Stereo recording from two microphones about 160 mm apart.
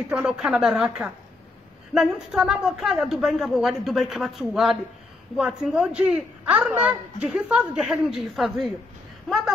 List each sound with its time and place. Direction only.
0.1 s a child's voice: 5° right (ahead or behind)